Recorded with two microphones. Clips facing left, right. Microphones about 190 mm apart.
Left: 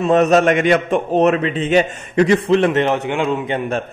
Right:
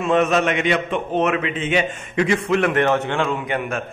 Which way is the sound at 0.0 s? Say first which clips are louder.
Left 5 dB; 40° left (ahead or behind).